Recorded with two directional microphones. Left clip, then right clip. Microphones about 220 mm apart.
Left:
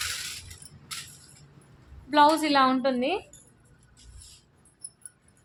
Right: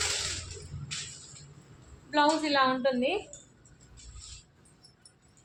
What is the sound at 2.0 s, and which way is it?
A woman's voice, 55° left (ahead or behind).